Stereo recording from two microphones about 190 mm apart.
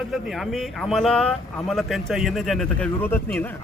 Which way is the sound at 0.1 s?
Centre (ahead or behind).